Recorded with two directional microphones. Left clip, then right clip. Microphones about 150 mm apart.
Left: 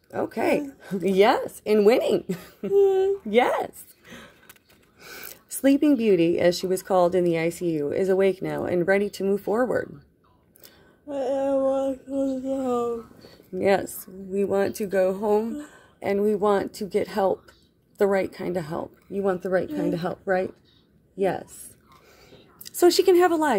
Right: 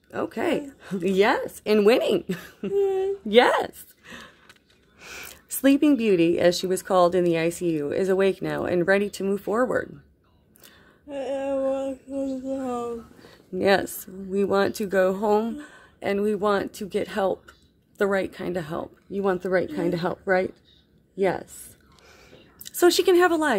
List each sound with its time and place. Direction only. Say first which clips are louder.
0.3 s speech: left 3 dB; 10° right (ahead or behind)
1.5 s speech: even; 30° right (ahead or behind)
1.9 s speech: right 1 dB; 15° right (ahead or behind)
2.7 s a sound: left 4 dB; 25° left (ahead or behind)
3.3 s speech: right 8 dB; 45° right (ahead or behind)
4.0 s a sound: right 3 dB; 15° right (ahead or behind)
5.0 s speech: right 2 dB; 20° right (ahead or behind)
11.1 s a sound: left 3 dB; 30° left (ahead or behind)
13.6 s speech: right 1 dB; 30° right (ahead or behind); by 15.5 s 50° right (ahead or behind)
15.8 s speech: left 1 dB; 20° right (ahead or behind)
19.1 s speech: right 1 dB; 35° right (ahead or behind)
22.0 s a sound: right 3 dB; 20° right (ahead or behind)